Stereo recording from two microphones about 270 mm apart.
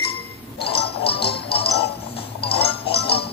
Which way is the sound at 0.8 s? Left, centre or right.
Centre.